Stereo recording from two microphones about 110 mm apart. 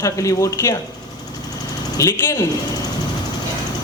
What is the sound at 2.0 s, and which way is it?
Speech, 25° left (ahead or behind).